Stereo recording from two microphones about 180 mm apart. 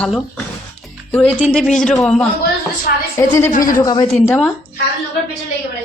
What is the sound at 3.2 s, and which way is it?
Speech, 15° left (ahead or behind).